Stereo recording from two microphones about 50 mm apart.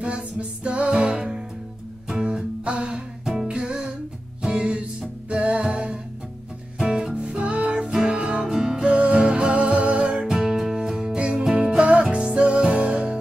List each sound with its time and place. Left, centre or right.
0.0 s music: right
2.2 s music: right
6.8 s music: centre
7.2 s music: right
11.1 s music: right